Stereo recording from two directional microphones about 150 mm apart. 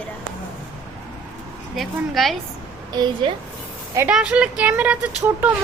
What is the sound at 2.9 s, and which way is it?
Speech, 30° right (ahead or behind).